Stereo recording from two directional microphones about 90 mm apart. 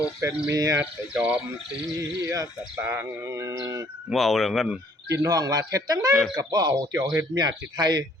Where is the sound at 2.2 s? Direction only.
40° right (ahead or behind).